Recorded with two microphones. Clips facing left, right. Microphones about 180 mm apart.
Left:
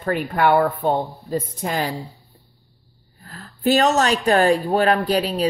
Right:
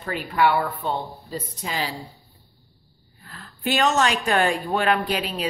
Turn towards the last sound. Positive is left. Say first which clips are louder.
# left 6 dB
turn(degrees=40)  # may be behind; listen again after turning